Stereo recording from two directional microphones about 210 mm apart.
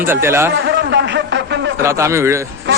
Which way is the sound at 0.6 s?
55° right (ahead or behind).